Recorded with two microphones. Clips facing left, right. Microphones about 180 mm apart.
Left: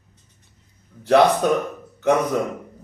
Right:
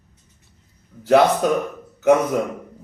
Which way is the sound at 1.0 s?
5° right (ahead or behind).